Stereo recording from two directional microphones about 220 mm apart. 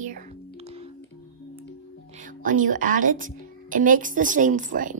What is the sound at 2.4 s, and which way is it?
A woman's voice, 35° right (ahead or behind).